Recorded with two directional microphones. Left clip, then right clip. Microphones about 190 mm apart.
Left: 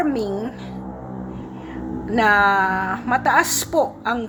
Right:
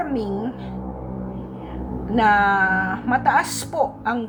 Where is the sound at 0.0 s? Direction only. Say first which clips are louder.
Left 3 dB; 15° left (ahead or behind).